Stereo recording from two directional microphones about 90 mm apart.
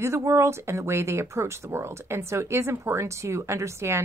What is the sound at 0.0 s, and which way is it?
A woman's voice, 30° right (ahead or behind).